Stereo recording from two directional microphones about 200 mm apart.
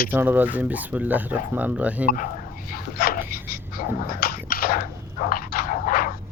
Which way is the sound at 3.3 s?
50° left (ahead or behind).